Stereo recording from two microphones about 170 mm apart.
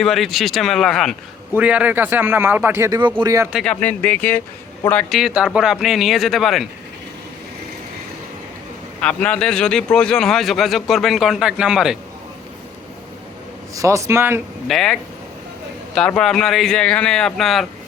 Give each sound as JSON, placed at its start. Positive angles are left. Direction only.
{"t": 0.0, "sound": "a man's voice", "side_deg": 0}
{"t": 3.5, "sound": "a man's voice", "side_deg": 5}
{"t": 5.0, "sound": "a man's voice", "side_deg": 0}
{"t": 9.0, "sound": "a man's voice", "side_deg": 5}
{"t": 13.7, "sound": "a man's voice", "side_deg": -20}
{"t": 14.7, "sound": "a man's voice", "side_deg": 0}
{"t": 16.0, "sound": "a man's voice", "side_deg": 5}